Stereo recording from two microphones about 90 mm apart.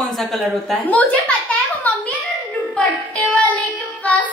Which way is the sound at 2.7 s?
10° left (ahead or behind).